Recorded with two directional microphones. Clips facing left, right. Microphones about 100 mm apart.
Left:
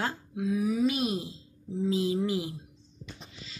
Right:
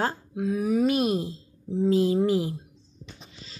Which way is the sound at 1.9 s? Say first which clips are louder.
Right 6 dB; 45° right (ahead or behind).